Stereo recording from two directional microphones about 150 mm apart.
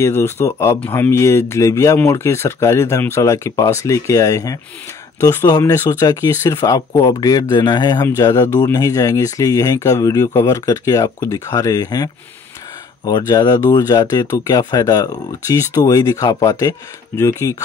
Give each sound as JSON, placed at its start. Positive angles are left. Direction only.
{"t": 0.0, "sound": "speech", "side_deg": 15}